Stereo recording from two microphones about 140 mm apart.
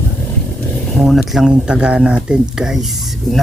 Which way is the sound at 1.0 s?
Centre (ahead or behind).